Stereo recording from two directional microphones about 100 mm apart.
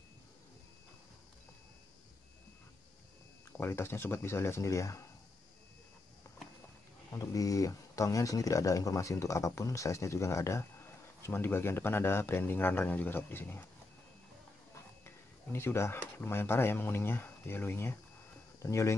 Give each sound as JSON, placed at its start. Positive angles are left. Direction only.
{"t": 3.5, "sound": "speech", "side_deg": 25}
{"t": 7.1, "sound": "speech", "side_deg": 35}
{"t": 15.0, "sound": "speech", "side_deg": 25}